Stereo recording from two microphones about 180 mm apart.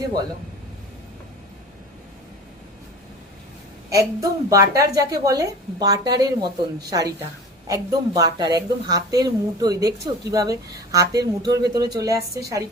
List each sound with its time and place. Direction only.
3.8 s a woman's voice: 20° right (ahead or behind)